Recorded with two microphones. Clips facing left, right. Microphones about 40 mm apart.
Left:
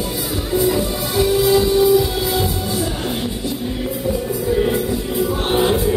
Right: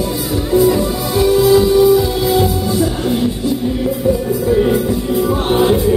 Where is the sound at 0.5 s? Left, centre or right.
Centre.